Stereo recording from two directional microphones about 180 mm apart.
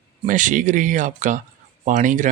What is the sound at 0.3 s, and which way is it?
Speech, 45° right (ahead or behind).